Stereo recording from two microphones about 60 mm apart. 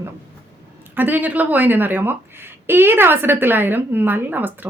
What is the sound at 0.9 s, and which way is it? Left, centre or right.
A woman's voice, right.